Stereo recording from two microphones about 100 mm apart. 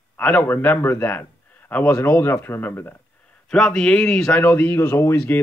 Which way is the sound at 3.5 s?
5° left (ahead or behind).